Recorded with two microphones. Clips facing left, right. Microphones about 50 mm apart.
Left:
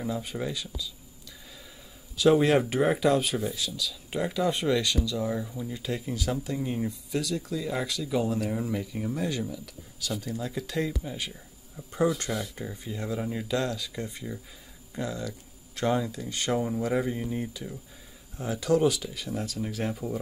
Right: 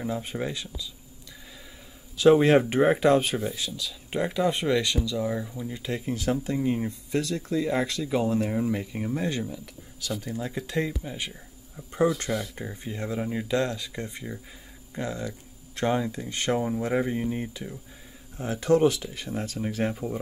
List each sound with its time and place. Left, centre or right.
0.0 s speech: right
2.1 s speech: centre
5.1 s speech: centre
5.8 s speech: right
13.2 s speech: centre
13.5 s speech: right